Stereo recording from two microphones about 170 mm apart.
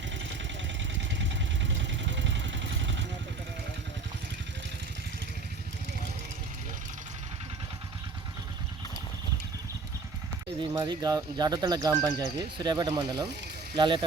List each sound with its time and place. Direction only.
0.9 s vehicle: 90° right
10.8 s speech: 20° right (ahead or behind)